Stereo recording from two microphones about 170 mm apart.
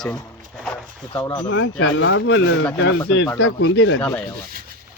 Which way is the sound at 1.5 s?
90° left.